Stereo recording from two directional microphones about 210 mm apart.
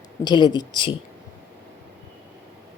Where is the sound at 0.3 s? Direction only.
20° left (ahead or behind).